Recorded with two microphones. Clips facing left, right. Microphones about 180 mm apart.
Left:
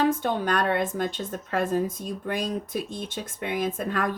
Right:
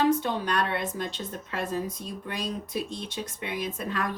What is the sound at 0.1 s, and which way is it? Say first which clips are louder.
A woman's voice: left 1 dB; 50° left (ahead or behind).